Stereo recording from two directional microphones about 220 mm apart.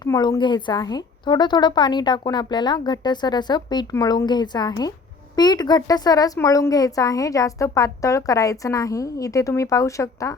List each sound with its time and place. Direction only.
0.0 s a woman's voice: 20° left (ahead or behind)